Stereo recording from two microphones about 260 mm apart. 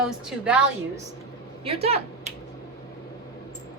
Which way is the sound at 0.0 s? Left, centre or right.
Centre.